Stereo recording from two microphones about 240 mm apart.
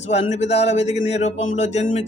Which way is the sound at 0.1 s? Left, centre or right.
Left.